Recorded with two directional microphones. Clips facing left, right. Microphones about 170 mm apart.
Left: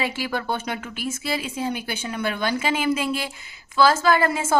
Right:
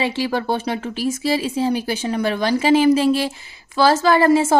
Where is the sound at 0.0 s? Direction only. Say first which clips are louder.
Right 5 dB; 30° right (ahead or behind).